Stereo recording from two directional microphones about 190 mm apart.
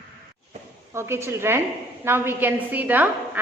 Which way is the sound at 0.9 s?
15° right (ahead or behind).